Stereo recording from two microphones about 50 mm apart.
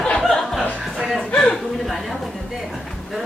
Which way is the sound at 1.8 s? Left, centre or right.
Centre.